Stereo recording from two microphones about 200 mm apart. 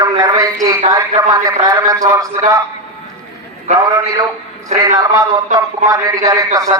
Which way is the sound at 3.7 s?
15° right (ahead or behind).